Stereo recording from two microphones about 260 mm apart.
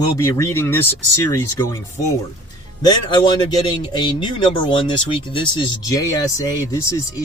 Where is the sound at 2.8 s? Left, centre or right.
Centre.